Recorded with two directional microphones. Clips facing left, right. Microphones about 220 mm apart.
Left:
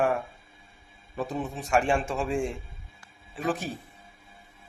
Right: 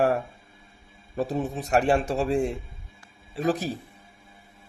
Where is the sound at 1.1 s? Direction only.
40° right (ahead or behind).